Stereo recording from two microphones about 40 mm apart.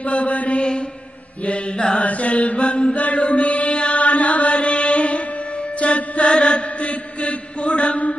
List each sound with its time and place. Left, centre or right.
0.0 s mantra: left
5.8 s music: left
6.3 s chant: left